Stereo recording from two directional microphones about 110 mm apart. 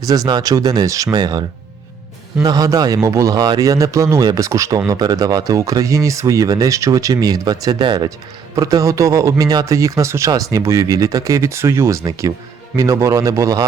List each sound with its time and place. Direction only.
0.1 s a man's voice: 35° right (ahead or behind)